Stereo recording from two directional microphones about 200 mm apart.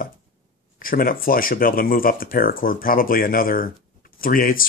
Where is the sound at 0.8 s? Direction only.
45° left (ahead or behind).